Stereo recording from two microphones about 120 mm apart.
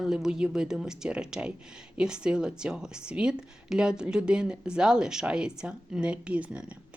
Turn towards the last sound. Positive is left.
turn(degrees=-10)  # may be behind; listen again after turning